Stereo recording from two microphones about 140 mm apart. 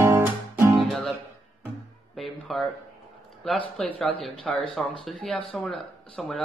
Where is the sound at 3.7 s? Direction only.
Centre (ahead or behind).